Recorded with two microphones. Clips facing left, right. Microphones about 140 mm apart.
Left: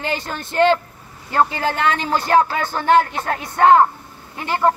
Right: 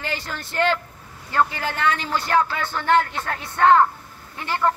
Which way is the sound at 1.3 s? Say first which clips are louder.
Left 4 dB; 40° left (ahead or behind).